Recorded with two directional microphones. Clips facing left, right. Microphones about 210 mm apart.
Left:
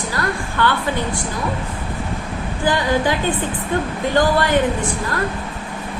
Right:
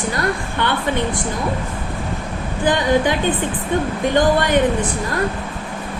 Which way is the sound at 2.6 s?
20° right (ahead or behind).